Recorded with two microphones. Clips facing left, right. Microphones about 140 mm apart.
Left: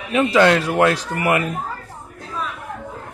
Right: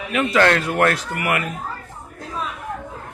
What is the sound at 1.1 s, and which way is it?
Speech, 25° left (ahead or behind).